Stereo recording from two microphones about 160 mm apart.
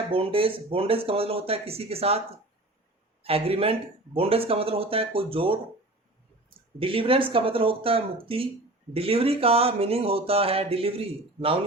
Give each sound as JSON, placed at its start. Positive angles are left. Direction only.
{"t": 0.1, "sound": "speech", "side_deg": -35}
{"t": 3.2, "sound": "speech", "side_deg": -35}
{"t": 6.7, "sound": "speech", "side_deg": -35}